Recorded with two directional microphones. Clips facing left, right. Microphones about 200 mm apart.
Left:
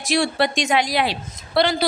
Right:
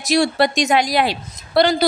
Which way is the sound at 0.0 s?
40° right (ahead or behind).